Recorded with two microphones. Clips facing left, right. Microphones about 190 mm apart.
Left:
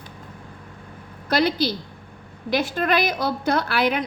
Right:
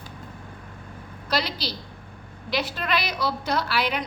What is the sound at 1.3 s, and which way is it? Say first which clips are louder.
A woman's voice: left 7 dB; 50° left (ahead or behind).